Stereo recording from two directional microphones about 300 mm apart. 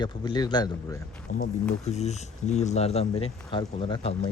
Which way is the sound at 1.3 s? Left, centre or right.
Left.